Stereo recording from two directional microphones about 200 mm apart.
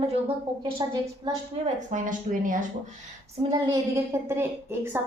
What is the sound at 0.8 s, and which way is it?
Speech, 20° right (ahead or behind).